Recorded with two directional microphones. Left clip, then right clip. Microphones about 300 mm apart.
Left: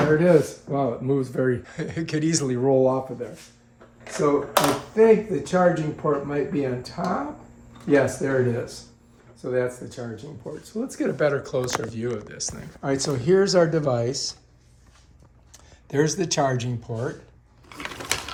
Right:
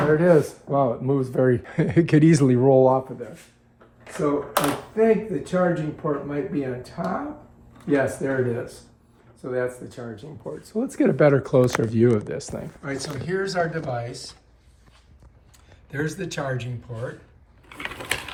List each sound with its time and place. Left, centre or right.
0.2 s speech: centre
4.0 s speech: centre
10.8 s speech: centre
12.8 s speech: centre
15.5 s a sound: centre
16.2 s speech: centre
17.7 s a sound: left